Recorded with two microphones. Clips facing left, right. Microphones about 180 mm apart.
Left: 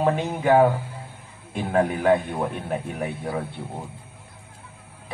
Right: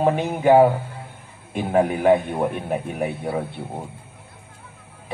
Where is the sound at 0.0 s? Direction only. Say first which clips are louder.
Right 3 dB; 15° right (ahead or behind).